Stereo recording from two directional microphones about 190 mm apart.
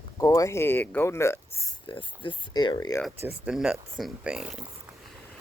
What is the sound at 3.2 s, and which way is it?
Speech, 10° right (ahead or behind).